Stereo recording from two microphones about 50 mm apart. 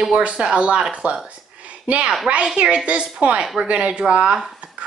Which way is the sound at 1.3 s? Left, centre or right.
Right.